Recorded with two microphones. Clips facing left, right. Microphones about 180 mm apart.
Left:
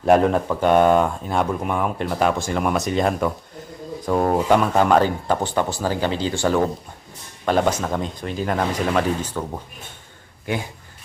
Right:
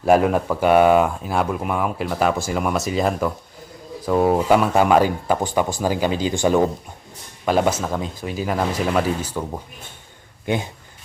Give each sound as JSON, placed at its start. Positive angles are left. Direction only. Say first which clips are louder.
{"t": 0.0, "sound": "speech", "louder": "even", "side_deg": -5}
{"t": 10.4, "sound": "speech", "louder": "right 3 dB", "side_deg": -20}